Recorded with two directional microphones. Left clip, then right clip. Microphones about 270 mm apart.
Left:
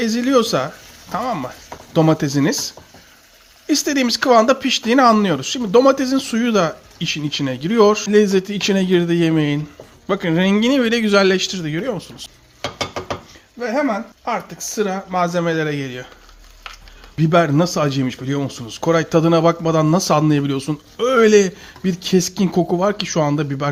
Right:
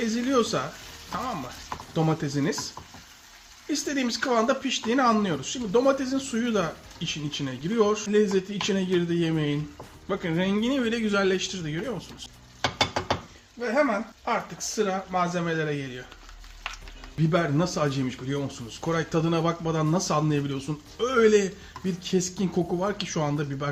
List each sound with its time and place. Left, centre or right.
0.0 s speech: left
13.6 s speech: left
17.2 s speech: left